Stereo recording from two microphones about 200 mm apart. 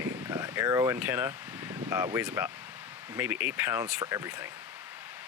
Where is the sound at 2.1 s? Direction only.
10° right (ahead or behind).